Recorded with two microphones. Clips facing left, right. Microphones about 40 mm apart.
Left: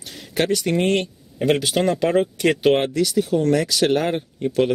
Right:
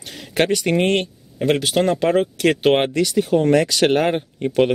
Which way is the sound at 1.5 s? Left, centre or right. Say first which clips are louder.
Right 2 dB; centre.